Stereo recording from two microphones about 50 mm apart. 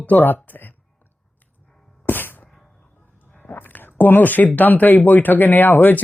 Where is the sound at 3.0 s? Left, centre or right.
Left.